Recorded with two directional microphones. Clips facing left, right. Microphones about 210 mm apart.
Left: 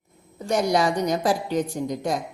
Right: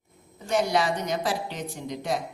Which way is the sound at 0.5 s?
40° left (ahead or behind).